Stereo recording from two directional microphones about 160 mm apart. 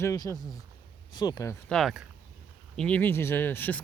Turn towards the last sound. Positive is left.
turn(degrees=10)  # may be behind; listen again after turning